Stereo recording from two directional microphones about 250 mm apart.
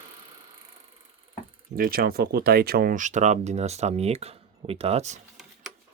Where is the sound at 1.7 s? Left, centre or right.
Right.